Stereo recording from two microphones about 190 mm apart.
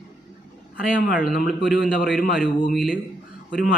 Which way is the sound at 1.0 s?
45° left (ahead or behind).